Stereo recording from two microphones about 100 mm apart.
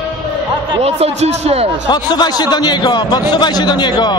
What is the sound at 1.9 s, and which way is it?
A man's voice, 45° left (ahead or behind).